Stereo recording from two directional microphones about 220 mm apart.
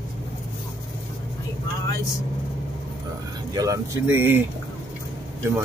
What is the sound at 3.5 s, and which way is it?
Speech, 15° right (ahead or behind).